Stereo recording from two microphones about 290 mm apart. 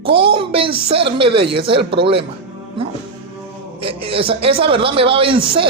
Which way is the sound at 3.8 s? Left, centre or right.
Centre.